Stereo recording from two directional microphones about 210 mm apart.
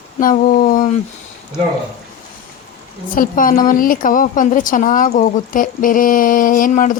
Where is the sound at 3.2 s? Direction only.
40° left (ahead or behind).